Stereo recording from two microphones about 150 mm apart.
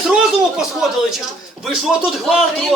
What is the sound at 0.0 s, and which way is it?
Speech, 5° right (ahead or behind).